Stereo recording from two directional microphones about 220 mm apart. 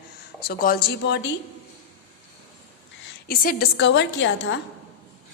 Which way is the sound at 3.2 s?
40° left (ahead or behind).